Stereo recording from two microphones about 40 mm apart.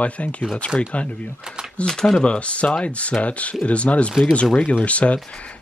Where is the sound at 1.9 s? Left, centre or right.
Centre.